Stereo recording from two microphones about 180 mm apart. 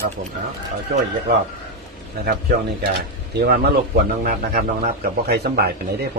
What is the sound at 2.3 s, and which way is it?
A man's voice, 60° right (ahead or behind).